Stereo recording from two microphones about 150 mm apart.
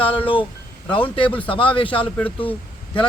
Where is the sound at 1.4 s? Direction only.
35° left (ahead or behind).